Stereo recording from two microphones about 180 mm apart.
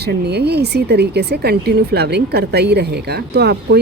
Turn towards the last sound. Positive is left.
turn(degrees=-65)  # may be behind; listen again after turning